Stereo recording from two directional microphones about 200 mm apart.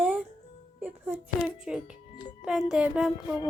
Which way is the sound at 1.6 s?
5° right (ahead or behind).